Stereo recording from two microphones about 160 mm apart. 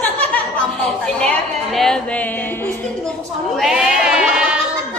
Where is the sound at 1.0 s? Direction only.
5° left (ahead or behind).